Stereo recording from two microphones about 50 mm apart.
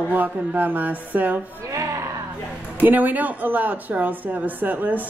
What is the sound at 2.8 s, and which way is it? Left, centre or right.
A woman's voice, right.